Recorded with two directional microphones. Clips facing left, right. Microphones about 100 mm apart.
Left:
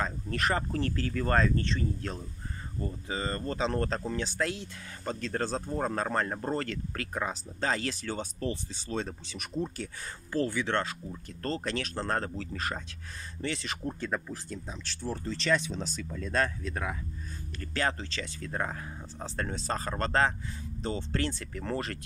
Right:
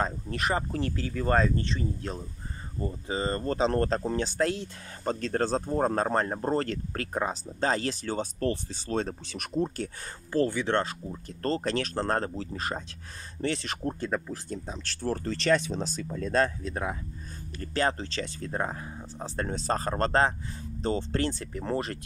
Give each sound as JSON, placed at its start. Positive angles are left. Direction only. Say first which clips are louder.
{"t": 0.3, "sound": "speech", "louder": "right 1 dB", "side_deg": -15}
{"t": 8.4, "sound": "speech", "louder": "right 5 dB", "side_deg": -55}
{"t": 10.7, "sound": "speech", "louder": "right 3 dB", "side_deg": -25}
{"t": 13.4, "sound": "speech", "louder": "right 4 dB", "side_deg": -40}
{"t": 15.0, "sound": "speech", "louder": "right 4 dB", "side_deg": -60}
{"t": 18.9, "sound": "speech", "louder": "right 2 dB", "side_deg": -10}
{"t": 19.3, "sound": "speech", "louder": "right 3 dB", "side_deg": -25}
{"t": 19.7, "sound": "speech", "louder": "right 4 dB", "side_deg": -35}
{"t": 21.3, "sound": "speech", "louder": "right 3 dB", "side_deg": -20}